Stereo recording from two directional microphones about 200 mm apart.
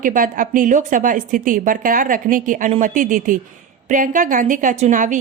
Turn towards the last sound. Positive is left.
turn(degrees=-40)  # may be behind; listen again after turning